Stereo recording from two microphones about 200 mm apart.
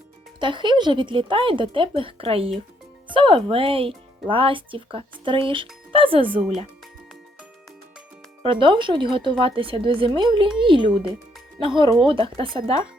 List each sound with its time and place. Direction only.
0.3 s speech: 25° right (ahead or behind)
8.4 s speech: 25° right (ahead or behind)